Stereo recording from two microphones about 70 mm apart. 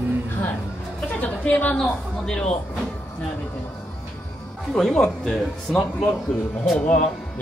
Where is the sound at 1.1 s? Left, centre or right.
Centre.